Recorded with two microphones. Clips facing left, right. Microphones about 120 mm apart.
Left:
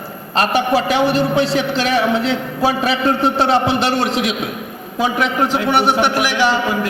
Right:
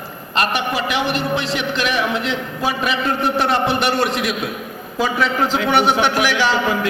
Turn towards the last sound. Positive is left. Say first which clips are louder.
# left 1 dB
turn(degrees=15)  # may be behind; listen again after turning